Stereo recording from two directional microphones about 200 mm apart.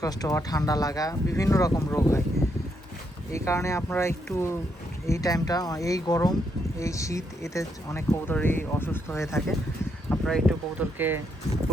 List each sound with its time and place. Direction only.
0.0 s speech: 20° left (ahead or behind)
3.3 s speech: 15° left (ahead or behind)
10.1 s speech: centre (ahead or behind)